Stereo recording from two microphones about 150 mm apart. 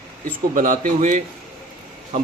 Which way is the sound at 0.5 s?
60° right (ahead or behind).